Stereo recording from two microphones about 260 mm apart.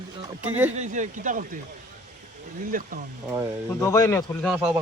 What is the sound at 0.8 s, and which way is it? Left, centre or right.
Speech, right.